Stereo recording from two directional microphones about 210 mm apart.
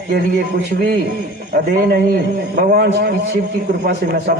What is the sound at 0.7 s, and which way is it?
A man's voice, 45° right (ahead or behind).